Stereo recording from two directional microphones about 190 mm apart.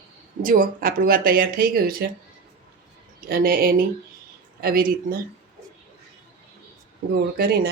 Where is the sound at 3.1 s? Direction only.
50° right (ahead or behind).